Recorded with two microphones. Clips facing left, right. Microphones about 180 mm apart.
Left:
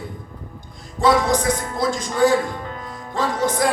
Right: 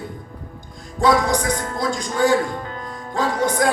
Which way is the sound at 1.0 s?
Centre (ahead or behind).